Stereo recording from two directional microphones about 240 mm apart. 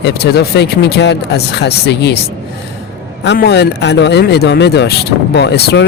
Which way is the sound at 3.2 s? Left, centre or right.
Left.